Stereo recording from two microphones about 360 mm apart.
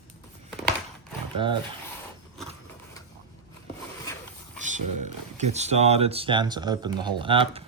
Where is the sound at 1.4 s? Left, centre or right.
Centre.